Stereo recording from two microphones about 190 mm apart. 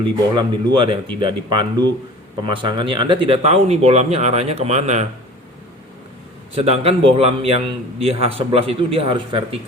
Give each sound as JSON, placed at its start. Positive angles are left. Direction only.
{"t": 0.0, "sound": "a man's voice", "side_deg": -25}
{"t": 6.5, "sound": "a man's voice", "side_deg": -30}